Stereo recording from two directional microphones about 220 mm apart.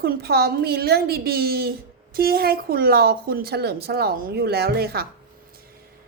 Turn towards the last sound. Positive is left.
turn(degrees=-45)  # may be behind; listen again after turning